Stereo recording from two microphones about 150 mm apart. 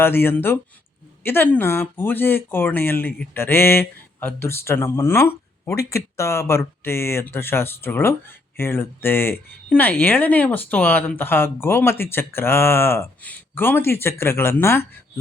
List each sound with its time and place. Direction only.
0.0 s speech: 15° left (ahead or behind)